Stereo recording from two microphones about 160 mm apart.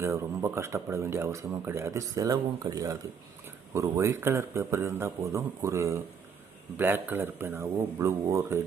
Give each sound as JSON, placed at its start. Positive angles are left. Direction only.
{"t": 0.0, "sound": "speech", "side_deg": -15}